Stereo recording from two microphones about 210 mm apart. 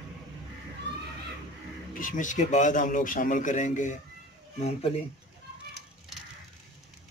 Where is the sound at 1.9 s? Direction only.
40° left (ahead or behind).